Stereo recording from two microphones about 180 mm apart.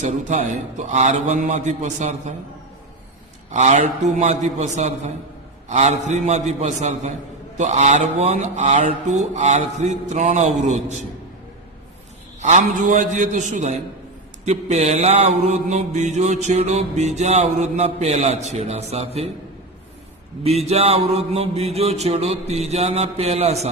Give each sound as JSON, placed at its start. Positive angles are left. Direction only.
{"t": 0.0, "sound": "a man's voice", "side_deg": -45}
{"t": 0.9, "sound": "mantra", "side_deg": -40}
{"t": 3.5, "sound": "mantra", "side_deg": -40}
{"t": 12.4, "sound": "a man's voice", "side_deg": -45}
{"t": 14.4, "sound": "mantra", "side_deg": -40}
{"t": 20.4, "sound": "mantra", "side_deg": -35}